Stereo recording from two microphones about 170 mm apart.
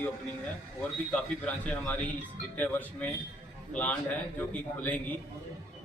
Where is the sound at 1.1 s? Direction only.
5° left (ahead or behind).